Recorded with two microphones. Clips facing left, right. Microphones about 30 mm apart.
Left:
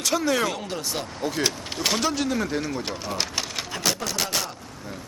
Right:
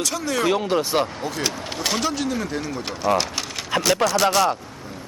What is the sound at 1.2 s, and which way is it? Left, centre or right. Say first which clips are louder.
Speech: even; centre.